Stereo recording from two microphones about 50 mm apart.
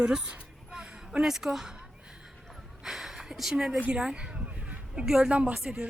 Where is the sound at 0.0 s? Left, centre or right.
Centre.